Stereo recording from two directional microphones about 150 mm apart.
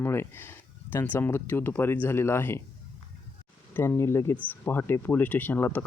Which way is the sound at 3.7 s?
15° left (ahead or behind).